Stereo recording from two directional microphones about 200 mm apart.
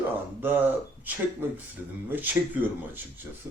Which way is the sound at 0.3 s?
10° right (ahead or behind).